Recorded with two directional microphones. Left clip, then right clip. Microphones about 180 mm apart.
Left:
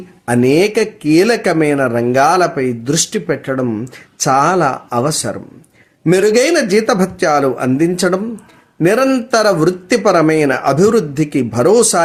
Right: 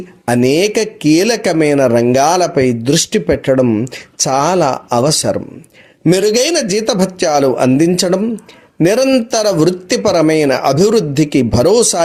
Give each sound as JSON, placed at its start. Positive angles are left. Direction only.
{"t": 0.3, "sound": "speech", "side_deg": -40}